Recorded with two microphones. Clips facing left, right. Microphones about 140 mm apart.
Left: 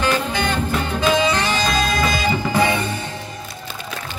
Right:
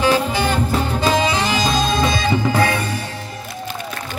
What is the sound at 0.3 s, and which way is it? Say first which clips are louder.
Music: right 2 dB; 5° right (ahead or behind).